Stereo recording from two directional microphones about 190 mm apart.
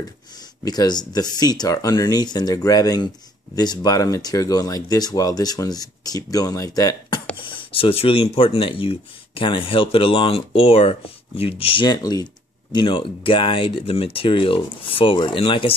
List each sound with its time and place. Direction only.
0.7 s speech: 20° left (ahead or behind)